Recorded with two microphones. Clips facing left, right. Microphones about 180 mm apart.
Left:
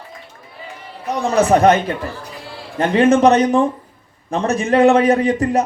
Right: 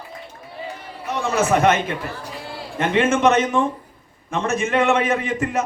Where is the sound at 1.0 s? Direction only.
35° left (ahead or behind).